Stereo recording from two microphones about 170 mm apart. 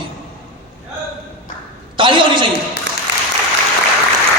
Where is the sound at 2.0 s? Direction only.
30° right (ahead or behind).